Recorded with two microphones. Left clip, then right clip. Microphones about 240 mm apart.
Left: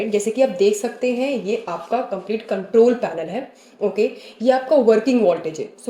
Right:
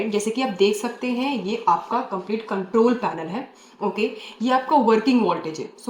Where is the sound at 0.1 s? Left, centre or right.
Centre.